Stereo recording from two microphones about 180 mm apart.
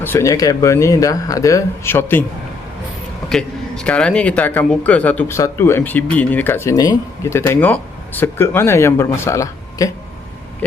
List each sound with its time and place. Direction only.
0.0 s speech: 15° left (ahead or behind)
3.2 s speech: 5° left (ahead or behind); by 9.9 s 20° left (ahead or behind)